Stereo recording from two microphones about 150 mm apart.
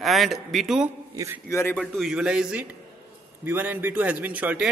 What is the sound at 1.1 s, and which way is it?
Speech, 20° right (ahead or behind).